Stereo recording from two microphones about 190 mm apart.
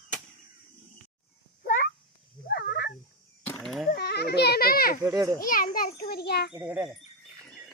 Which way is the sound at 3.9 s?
60° left (ahead or behind).